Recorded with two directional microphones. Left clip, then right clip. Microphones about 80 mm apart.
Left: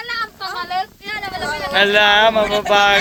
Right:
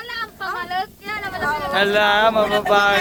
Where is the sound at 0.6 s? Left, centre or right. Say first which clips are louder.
Left 5 dB; left.